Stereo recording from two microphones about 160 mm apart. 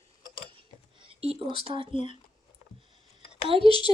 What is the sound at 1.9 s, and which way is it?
Speech, 45° left (ahead or behind).